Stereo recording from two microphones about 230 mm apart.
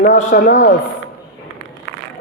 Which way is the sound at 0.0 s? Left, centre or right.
Left.